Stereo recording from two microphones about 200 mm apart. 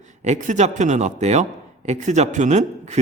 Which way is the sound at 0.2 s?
35° right (ahead or behind).